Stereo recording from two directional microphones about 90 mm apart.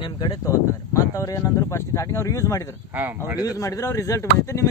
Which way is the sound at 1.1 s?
40° left (ahead or behind).